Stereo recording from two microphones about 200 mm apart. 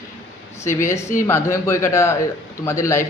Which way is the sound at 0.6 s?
15° left (ahead or behind).